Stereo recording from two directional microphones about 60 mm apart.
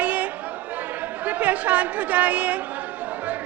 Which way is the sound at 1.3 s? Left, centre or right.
Right.